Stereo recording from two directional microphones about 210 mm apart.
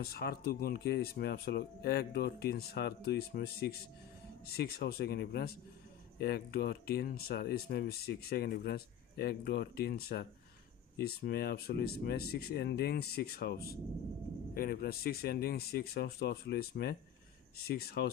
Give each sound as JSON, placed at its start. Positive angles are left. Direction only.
{"t": 0.0, "sound": "speech", "side_deg": 50}